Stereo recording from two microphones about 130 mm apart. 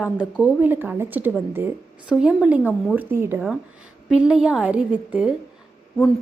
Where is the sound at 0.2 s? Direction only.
10° right (ahead or behind).